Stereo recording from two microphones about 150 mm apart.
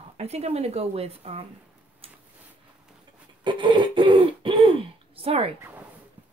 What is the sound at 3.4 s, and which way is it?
Throat clearing, 30° right (ahead or behind).